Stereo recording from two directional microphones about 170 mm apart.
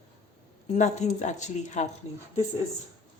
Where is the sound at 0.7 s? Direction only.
45° left (ahead or behind).